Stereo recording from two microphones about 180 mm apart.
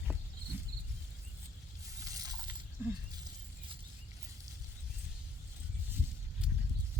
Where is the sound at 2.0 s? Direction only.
20° right (ahead or behind).